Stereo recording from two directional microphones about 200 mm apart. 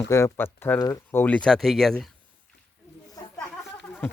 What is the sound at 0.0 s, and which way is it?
Speech, 15° left (ahead or behind).